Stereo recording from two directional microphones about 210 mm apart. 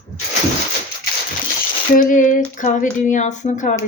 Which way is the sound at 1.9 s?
40° left (ahead or behind).